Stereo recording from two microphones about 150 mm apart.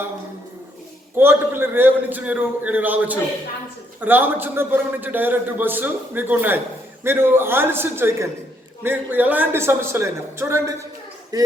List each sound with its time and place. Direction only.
1.1 s a man's voice: 15° right (ahead or behind)